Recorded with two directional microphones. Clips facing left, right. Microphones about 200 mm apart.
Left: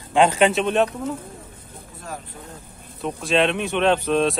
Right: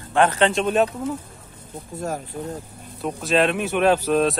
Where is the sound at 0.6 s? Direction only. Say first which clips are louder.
Even; centre (ahead or behind).